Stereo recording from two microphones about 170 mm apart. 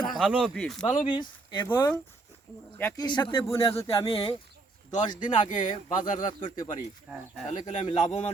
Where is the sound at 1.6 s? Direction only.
10° left (ahead or behind).